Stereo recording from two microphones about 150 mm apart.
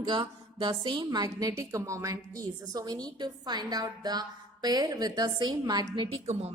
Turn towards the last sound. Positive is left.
turn(degrees=-35)  # may be behind; listen again after turning